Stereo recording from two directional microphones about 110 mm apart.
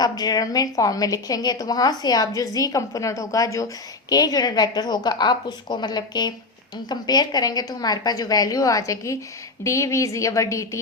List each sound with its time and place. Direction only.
0.0 s a woman's voice: 35° left (ahead or behind)